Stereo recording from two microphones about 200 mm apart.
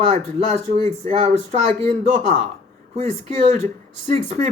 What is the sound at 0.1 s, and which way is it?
Speech, 30° right (ahead or behind).